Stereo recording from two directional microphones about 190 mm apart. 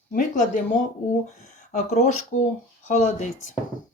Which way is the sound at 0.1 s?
40° left (ahead or behind).